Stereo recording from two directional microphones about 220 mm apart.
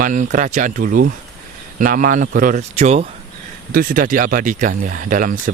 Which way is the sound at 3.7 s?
40° right (ahead or behind).